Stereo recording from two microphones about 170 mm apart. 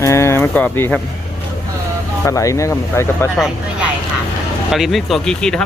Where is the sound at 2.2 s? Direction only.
20° left (ahead or behind).